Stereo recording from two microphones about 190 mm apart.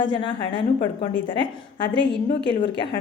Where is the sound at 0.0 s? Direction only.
25° left (ahead or behind).